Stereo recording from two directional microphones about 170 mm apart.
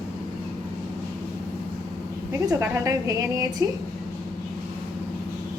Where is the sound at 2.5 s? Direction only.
20° right (ahead or behind).